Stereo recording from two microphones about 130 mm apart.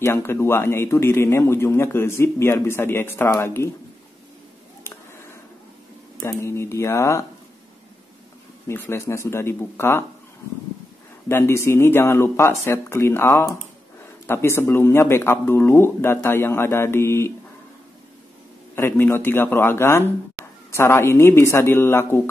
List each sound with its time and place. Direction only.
0.0 s a man's voice: 20° left (ahead or behind)
4.9 s a sound: 15° left (ahead or behind)
6.2 s a man's voice: 20° left (ahead or behind)
8.6 s a man's voice: 20° left (ahead or behind)
11.2 s a man's voice: 20° left (ahead or behind)
18.8 s a man's voice: 15° left (ahead or behind)